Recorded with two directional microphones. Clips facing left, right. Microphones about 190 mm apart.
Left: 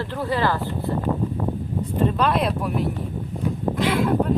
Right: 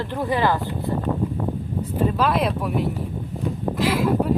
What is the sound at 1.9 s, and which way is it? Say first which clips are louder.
Speech: even; 5° right (ahead or behind).